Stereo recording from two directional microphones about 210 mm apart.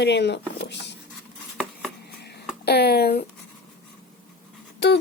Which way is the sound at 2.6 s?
50° left (ahead or behind).